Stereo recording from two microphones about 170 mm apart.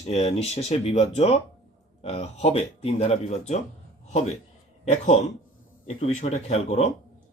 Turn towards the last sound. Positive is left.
turn(degrees=40)  # may be behind; listen again after turning